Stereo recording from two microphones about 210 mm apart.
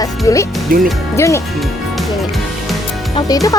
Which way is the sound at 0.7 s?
40° right (ahead or behind).